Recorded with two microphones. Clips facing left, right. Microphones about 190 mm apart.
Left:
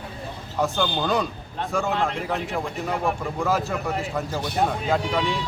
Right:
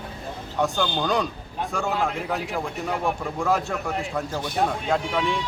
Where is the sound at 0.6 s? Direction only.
Centre (ahead or behind).